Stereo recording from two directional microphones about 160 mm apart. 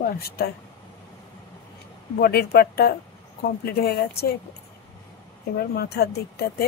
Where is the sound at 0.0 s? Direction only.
75° left (ahead or behind).